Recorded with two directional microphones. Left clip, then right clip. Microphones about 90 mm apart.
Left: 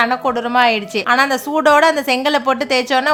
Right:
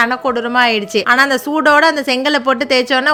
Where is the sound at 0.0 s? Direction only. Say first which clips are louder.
Right 1 dB; 20° right (ahead or behind).